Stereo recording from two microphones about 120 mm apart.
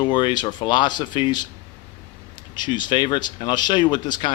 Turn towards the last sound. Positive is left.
turn(degrees=40)  # may be behind; listen again after turning